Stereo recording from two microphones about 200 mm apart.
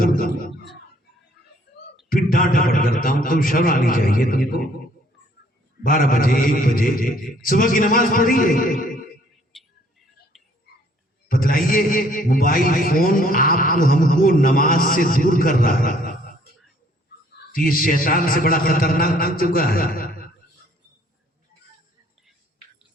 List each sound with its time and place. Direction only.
0.0 s a sound: 45° left (ahead or behind)
2.0 s a man's voice: 45° left (ahead or behind)
5.8 s a man's voice: 45° left (ahead or behind)
9.3 s music: centre (ahead or behind)
10.3 s tick: centre (ahead or behind)
11.3 s a man's voice: 45° left (ahead or behind)
17.5 s a man's voice: 45° left (ahead or behind)